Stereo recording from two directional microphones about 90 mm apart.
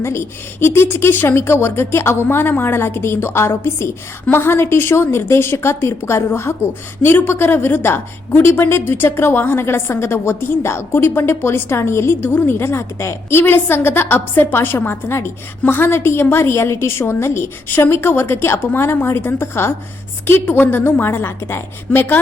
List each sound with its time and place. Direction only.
0.0 s a woman's voice: 30° left (ahead or behind)